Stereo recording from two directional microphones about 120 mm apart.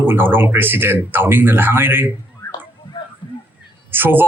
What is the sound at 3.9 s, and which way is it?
Speech, 15° right (ahead or behind).